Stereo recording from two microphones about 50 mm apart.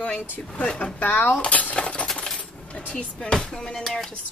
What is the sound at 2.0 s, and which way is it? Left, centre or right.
Coin, centre.